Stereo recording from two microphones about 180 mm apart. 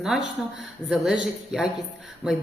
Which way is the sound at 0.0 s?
5° right (ahead or behind).